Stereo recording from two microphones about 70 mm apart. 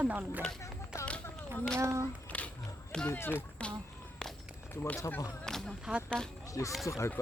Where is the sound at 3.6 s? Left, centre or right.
Centre.